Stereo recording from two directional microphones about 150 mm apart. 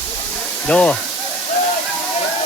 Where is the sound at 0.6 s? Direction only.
5° left (ahead or behind).